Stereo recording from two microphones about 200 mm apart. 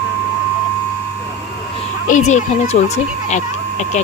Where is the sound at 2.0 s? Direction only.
35° left (ahead or behind).